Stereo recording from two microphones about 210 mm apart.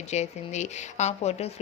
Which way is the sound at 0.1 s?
35° left (ahead or behind).